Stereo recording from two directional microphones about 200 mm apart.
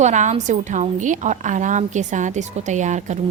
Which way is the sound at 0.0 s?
35° right (ahead or behind).